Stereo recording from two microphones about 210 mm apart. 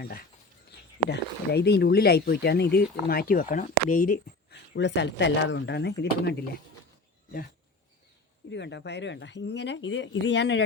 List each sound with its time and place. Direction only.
1.1 s speech: 50° left (ahead or behind)
8.4 s speech: 55° left (ahead or behind)